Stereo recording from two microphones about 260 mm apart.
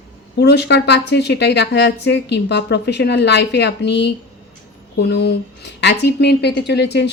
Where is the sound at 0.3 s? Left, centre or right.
Left.